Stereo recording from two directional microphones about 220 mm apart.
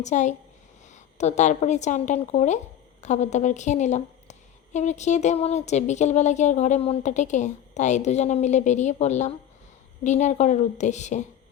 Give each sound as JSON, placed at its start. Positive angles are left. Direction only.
{"t": 0.0, "sound": "a woman's voice", "side_deg": 30}